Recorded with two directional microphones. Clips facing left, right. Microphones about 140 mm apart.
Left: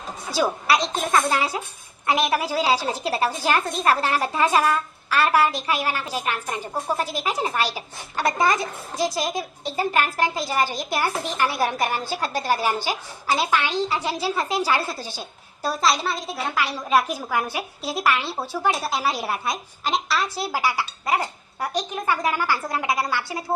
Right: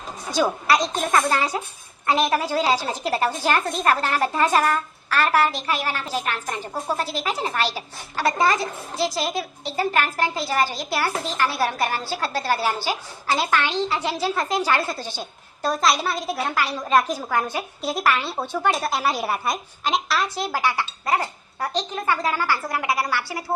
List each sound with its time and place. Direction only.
0.3 s a woman's voice: 5° left (ahead or behind)
20.4 s a woman's voice: 10° left (ahead or behind)